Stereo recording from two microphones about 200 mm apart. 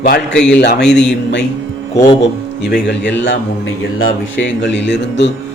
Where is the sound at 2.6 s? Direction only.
60° left (ahead or behind).